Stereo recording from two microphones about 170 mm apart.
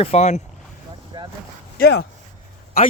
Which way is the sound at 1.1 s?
25° right (ahead or behind).